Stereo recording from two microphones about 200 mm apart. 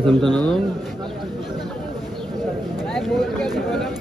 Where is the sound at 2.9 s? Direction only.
Centre (ahead or behind).